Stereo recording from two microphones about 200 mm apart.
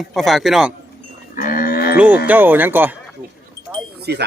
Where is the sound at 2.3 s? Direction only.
10° right (ahead or behind).